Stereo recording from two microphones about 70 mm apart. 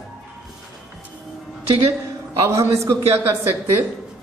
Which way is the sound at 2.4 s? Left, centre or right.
Right.